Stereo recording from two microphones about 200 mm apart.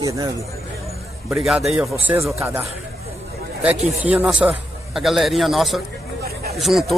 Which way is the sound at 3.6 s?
5° right (ahead or behind).